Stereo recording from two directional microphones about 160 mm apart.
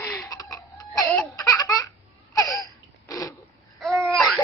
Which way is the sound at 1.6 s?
20° left (ahead or behind).